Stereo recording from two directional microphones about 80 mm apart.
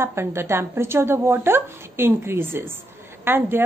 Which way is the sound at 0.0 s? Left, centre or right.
Right.